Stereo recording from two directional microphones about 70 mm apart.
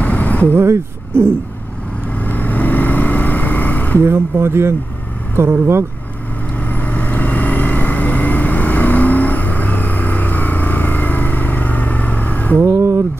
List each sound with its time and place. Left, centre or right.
0.0 s vehicle: left
0.5 s speech: right
2.1 s vehicle: left
4.0 s speech: right
6.6 s vehicle: left